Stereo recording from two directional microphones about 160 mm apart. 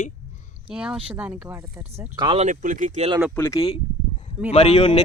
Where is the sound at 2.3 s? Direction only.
50° right (ahead or behind).